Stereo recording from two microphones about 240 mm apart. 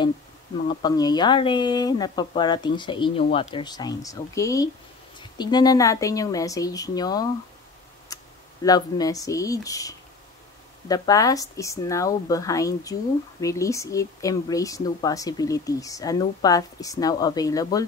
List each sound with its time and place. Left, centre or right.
0.8 s speech: centre
8.6 s speech: centre